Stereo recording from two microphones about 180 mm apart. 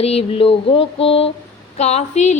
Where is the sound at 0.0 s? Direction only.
35° left (ahead or behind).